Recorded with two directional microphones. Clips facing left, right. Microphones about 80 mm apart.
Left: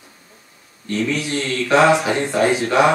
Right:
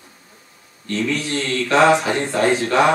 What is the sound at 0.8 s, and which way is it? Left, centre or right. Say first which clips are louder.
Speech: left 1 dB; centre.